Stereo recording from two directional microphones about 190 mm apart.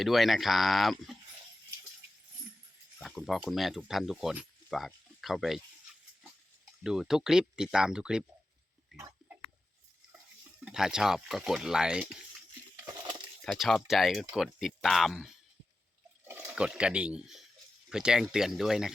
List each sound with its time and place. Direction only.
0.0 s speech: centre (ahead or behind)
3.0 s speech: centre (ahead or behind)
6.8 s speech: centre (ahead or behind)
9.0 s a sound: 15° right (ahead or behind)
10.7 s speech: 5° right (ahead or behind)
12.7 s crushing: 20° right (ahead or behind)
13.4 s speech: centre (ahead or behind)